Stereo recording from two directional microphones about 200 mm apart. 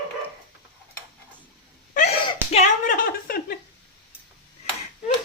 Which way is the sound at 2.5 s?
30° left (ahead or behind).